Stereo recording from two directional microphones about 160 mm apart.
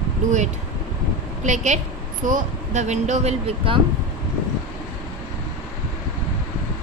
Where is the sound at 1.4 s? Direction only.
50° right (ahead or behind).